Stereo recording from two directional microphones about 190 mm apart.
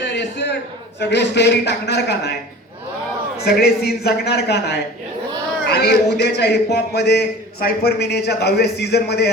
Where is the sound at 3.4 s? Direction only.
55° left (ahead or behind).